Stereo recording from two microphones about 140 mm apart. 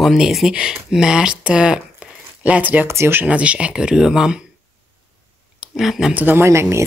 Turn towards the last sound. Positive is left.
turn(degrees=-20)  # may be behind; listen again after turning